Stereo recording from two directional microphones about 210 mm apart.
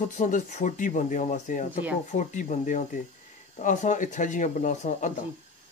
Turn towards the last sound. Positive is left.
turn(degrees=35)  # may be behind; listen again after turning